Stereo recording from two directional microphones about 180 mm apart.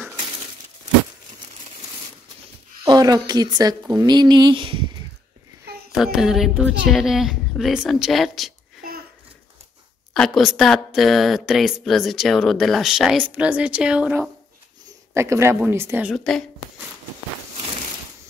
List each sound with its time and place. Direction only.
2.8 s a woman's voice: 20° right (ahead or behind)
6.1 s speech: centre (ahead or behind)
10.1 s speech: centre (ahead or behind)